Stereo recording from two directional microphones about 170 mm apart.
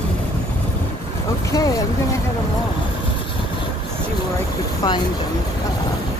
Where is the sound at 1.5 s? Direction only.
20° left (ahead or behind).